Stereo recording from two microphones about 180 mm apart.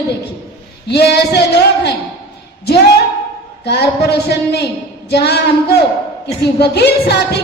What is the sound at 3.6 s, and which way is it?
A woman's voice, 65° left (ahead or behind).